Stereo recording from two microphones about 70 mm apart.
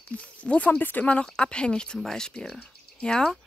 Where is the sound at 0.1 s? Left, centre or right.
Centre.